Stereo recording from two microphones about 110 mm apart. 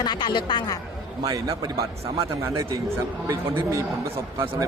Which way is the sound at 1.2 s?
35° right (ahead or behind).